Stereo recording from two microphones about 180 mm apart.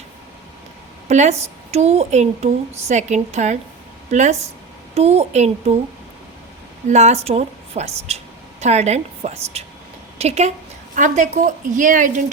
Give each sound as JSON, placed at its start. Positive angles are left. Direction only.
{"t": 1.0, "sound": "a woman's voice", "side_deg": -40}
{"t": 6.9, "sound": "a woman's voice", "side_deg": -40}